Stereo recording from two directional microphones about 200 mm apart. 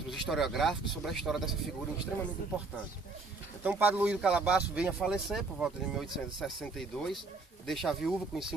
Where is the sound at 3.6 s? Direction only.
10° right (ahead or behind).